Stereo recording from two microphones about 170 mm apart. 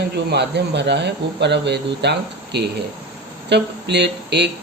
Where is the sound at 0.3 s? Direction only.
85° right.